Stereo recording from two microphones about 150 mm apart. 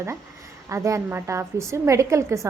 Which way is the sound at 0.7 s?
20° right (ahead or behind).